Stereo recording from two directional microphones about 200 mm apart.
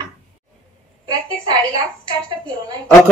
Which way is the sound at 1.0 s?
20° right (ahead or behind).